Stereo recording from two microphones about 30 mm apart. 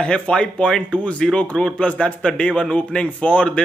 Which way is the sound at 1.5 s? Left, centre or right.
Left.